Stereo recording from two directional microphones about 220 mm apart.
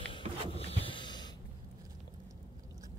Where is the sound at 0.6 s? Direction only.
25° left (ahead or behind).